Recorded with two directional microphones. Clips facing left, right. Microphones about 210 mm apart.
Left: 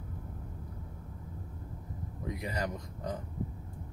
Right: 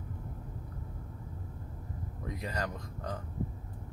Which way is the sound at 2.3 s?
15° left (ahead or behind).